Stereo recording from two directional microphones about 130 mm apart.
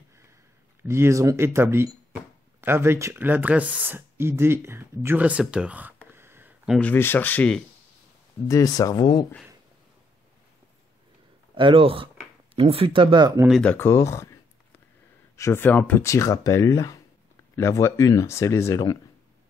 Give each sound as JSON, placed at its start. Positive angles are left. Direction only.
{"t": 0.8, "sound": "speech", "side_deg": -20}
{"t": 6.1, "sound": "a sound", "side_deg": -20}
{"t": 6.8, "sound": "speech", "side_deg": 15}
{"t": 8.5, "sound": "speech", "side_deg": 25}
{"t": 11.5, "sound": "speech", "side_deg": -40}
{"t": 13.6, "sound": "speech", "side_deg": 10}
{"t": 13.8, "sound": "speech", "side_deg": 20}
{"t": 15.3, "sound": "speech", "side_deg": 20}
{"t": 16.0, "sound": "speech", "side_deg": 25}